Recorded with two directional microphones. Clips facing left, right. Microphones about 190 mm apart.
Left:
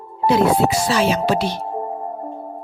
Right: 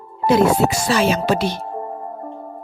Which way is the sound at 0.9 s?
50° right (ahead or behind).